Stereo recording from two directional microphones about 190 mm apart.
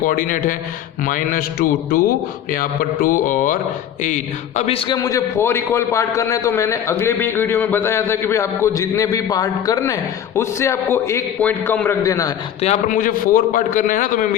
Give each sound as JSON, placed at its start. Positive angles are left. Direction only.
{"t": 0.0, "sound": "a man's voice", "side_deg": 45}
{"t": 5.0, "sound": "a man's voice", "side_deg": 15}
{"t": 12.6, "sound": "a man's voice", "side_deg": 40}